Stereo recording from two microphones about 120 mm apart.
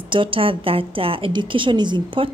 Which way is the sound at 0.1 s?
45° right (ahead or behind).